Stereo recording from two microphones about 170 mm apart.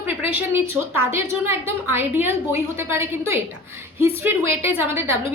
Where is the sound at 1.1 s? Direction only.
15° right (ahead or behind).